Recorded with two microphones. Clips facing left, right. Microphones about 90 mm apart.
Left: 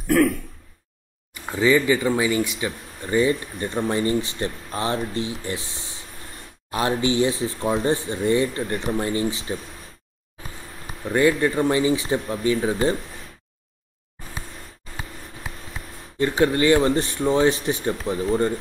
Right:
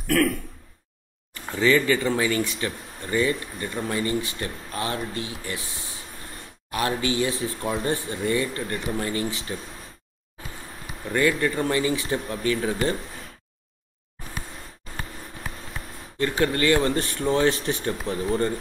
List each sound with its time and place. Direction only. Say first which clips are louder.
0.1 s speech: left 3 dB; 20° left (ahead or behind)
1.3 s speech: left 2 dB; 15° left (ahead or behind)
3.1 s speech: left 4 dB; 25° left (ahead or behind)
11.1 s speech: left 4 dB; 25° left (ahead or behind)
16.2 s speech: left 4 dB; 20° left (ahead or behind)